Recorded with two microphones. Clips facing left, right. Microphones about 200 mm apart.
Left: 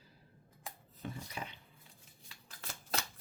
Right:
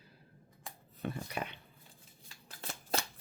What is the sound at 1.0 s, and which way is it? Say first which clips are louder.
Speech: right 6 dB; 65° right (ahead or behind).